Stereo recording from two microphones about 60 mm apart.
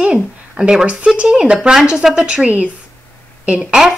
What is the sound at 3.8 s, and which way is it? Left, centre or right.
Speech, centre.